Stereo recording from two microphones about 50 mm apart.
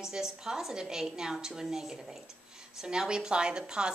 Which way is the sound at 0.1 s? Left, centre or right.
Centre.